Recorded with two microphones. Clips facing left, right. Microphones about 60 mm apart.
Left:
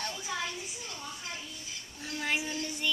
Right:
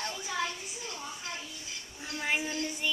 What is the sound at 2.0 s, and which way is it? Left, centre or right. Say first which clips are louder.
Child singing: right 1 dB; centre.